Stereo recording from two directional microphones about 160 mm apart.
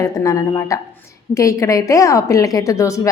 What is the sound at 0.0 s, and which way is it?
A woman's voice, 20° left (ahead or behind).